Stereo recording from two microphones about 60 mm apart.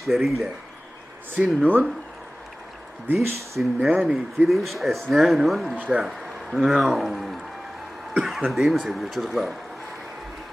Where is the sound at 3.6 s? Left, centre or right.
Centre.